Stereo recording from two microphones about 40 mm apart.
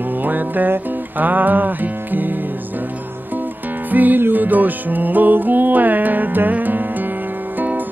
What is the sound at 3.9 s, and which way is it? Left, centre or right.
Music, right.